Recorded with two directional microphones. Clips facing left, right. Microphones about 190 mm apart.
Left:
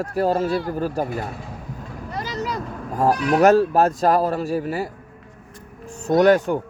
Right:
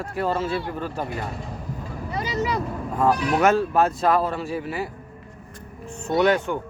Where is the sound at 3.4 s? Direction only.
40° left (ahead or behind).